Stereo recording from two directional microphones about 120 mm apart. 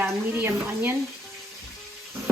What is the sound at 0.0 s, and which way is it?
Speech, 15° right (ahead or behind).